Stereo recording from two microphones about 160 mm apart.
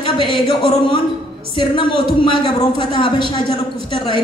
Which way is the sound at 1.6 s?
30° left (ahead or behind).